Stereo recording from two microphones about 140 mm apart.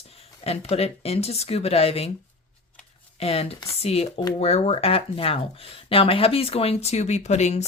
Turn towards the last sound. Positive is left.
turn(degrees=55)  # may be behind; listen again after turning